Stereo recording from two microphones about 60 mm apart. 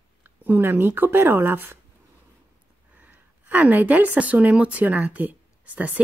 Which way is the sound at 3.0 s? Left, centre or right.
Right.